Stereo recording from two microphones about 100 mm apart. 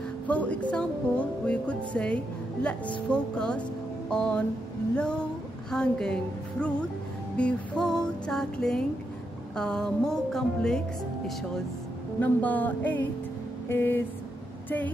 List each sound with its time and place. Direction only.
0.3 s speech: 15° left (ahead or behind)
7.3 s music: 10° left (ahead or behind)
12.2 s speech: 15° left (ahead or behind)
13.7 s a sound: 20° left (ahead or behind)